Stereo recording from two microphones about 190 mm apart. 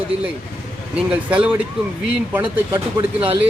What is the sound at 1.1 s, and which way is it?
A man's voice, 5° right (ahead or behind).